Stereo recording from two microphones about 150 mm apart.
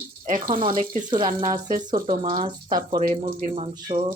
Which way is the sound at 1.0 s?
30° right (ahead or behind).